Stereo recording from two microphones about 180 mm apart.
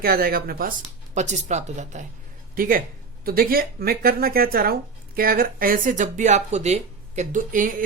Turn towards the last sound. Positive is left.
turn(degrees=-50)  # may be behind; listen again after turning